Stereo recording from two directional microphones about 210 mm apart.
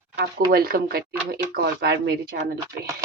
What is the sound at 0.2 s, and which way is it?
Speech, 45° right (ahead or behind).